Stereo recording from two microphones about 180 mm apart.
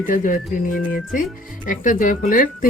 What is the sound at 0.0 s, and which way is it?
Speech, 50° left (ahead or behind).